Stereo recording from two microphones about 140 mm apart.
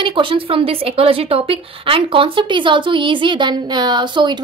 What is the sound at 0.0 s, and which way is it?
A woman's voice, 35° right (ahead or behind).